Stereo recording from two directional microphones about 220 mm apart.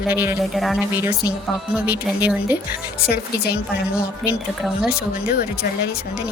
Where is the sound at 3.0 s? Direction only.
45° left (ahead or behind).